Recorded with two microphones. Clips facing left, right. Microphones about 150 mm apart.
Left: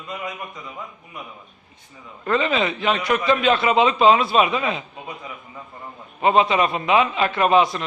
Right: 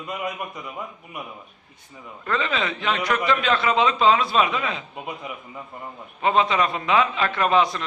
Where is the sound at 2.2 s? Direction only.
20° left (ahead or behind).